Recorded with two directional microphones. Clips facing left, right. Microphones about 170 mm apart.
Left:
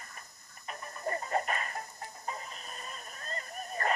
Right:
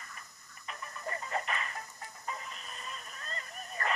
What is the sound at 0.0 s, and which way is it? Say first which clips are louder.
Tick-tock: left 1 dB; 40° left (ahead or behind).